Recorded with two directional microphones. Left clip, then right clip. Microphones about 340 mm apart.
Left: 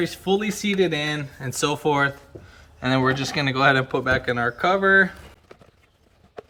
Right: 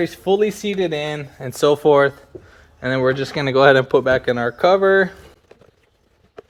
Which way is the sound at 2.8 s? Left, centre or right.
Centre.